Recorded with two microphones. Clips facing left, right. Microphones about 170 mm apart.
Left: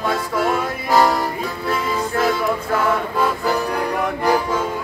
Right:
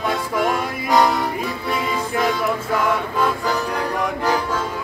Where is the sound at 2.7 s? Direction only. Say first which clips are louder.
Left 1 dB; 10° left (ahead or behind).